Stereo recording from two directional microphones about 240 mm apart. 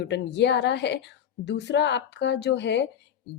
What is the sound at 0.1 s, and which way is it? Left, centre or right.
Speech, left.